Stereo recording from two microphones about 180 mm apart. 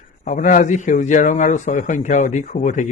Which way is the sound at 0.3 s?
50° left (ahead or behind).